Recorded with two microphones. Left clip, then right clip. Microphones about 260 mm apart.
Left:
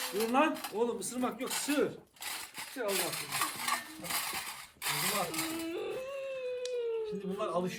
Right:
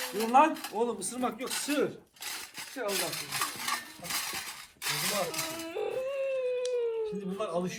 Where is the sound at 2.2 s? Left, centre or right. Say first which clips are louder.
Right 1 dB; left.